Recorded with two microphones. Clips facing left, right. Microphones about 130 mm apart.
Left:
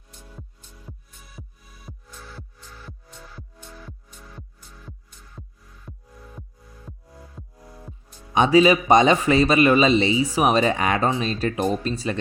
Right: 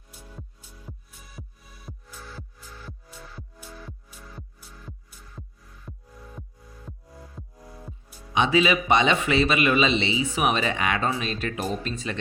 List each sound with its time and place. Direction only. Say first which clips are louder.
0.1 s music: even; 5° right (ahead or behind)
8.3 s a man's voice: left 6 dB; 40° left (ahead or behind)